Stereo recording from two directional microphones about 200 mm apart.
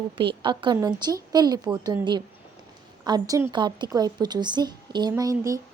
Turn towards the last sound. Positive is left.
turn(degrees=-15)  # may be behind; listen again after turning